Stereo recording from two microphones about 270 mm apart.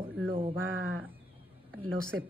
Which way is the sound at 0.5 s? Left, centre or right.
Right.